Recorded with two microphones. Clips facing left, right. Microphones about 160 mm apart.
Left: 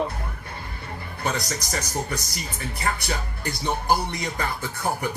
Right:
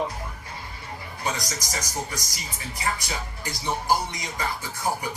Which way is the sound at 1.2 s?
60° left (ahead or behind).